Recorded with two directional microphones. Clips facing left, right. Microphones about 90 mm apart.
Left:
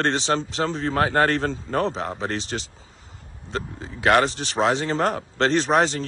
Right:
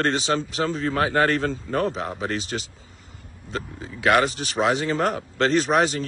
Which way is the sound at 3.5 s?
35° left (ahead or behind).